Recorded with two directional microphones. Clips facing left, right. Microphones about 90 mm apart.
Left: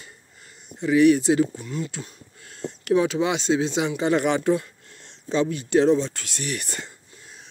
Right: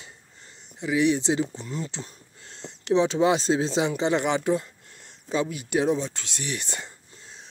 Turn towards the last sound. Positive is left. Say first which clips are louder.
# left 2 dB
turn(degrees=-20)  # may be behind; listen again after turning